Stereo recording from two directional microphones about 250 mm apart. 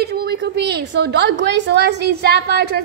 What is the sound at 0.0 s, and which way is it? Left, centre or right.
A woman's voice, right.